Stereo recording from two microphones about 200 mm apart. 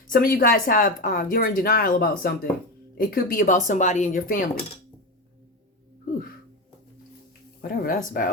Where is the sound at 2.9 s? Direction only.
45° left (ahead or behind).